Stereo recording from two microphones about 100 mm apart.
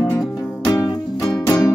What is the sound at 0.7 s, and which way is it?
Music, 35° left (ahead or behind).